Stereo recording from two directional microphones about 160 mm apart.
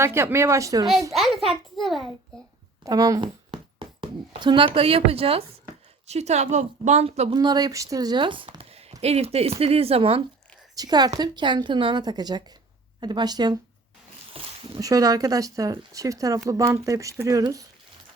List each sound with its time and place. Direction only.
0.0 s speech: 15° right (ahead or behind)
1.1 s a child's voice: centre (ahead or behind)
2.8 s a woman's voice: 20° right (ahead or behind); by 7.3 s 40° right (ahead or behind)
7.3 s speech: 25° right (ahead or behind)
10.8 s speech: 25° right (ahead or behind)
14.3 s a sound: 35° right (ahead or behind)
14.8 s speech: 20° right (ahead or behind)